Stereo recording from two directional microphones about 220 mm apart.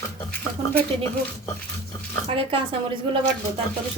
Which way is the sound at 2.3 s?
25° right (ahead or behind).